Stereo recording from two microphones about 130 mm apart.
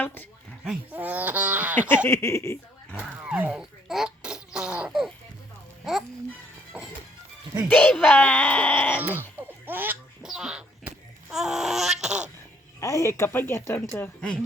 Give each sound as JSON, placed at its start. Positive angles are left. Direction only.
{"t": 0.0, "sound": "speech", "side_deg": 15}
{"t": 0.9, "sound": "baby laughter", "side_deg": -15}
{"t": 2.0, "sound": "speech", "side_deg": 20}
{"t": 2.9, "sound": "laughter", "side_deg": -10}
{"t": 5.8, "sound": "speech", "side_deg": 0}
{"t": 6.7, "sound": "music", "side_deg": -10}
{"t": 7.7, "sound": "speech", "side_deg": 10}
{"t": 9.0, "sound": "baby laughter", "side_deg": -15}
{"t": 9.6, "sound": "a sound", "side_deg": -15}
{"t": 10.2, "sound": "a sound", "side_deg": -5}
{"t": 10.8, "sound": "wail", "side_deg": -5}
{"t": 12.8, "sound": "speech", "side_deg": 25}